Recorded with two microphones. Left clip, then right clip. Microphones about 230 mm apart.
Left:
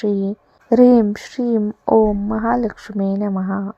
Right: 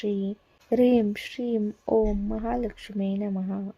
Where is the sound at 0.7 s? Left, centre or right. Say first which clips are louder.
Left 9 dB; centre.